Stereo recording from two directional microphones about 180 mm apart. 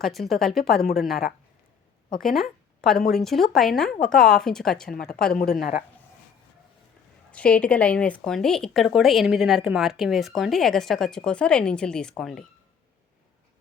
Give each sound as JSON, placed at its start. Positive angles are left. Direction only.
{"t": 0.0, "sound": "speech", "side_deg": 0}
{"t": 0.3, "sound": "a woman's voice", "side_deg": 55}
{"t": 2.2, "sound": "speech", "side_deg": 0}
{"t": 5.3, "sound": "a woman's voice", "side_deg": 60}
{"t": 7.3, "sound": "speech", "side_deg": 5}